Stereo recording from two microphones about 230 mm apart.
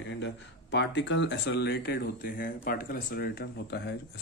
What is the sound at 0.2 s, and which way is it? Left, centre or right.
Speech, left.